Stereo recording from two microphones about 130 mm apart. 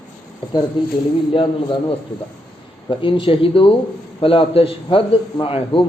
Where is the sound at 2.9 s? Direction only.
40° left (ahead or behind).